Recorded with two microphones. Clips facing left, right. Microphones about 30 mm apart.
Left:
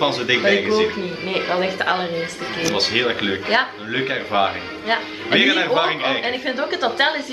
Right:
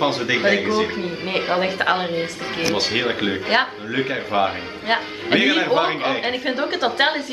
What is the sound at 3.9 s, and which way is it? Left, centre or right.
Speech, centre.